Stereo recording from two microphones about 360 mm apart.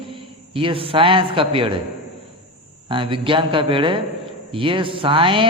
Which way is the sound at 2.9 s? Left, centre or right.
Centre.